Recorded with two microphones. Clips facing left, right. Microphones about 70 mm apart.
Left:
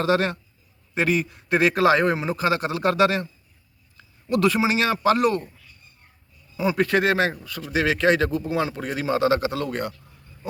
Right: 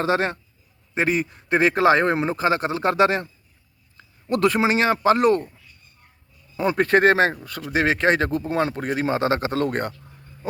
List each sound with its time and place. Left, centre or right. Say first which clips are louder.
0.0 s a man's voice: even; right
6.6 s a man's voice: right 3 dB; right